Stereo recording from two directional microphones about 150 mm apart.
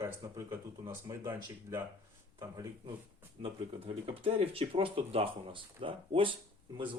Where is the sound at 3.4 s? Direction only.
40° right (ahead or behind).